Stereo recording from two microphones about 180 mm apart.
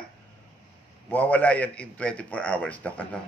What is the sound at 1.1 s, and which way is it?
Speech, 10° left (ahead or behind).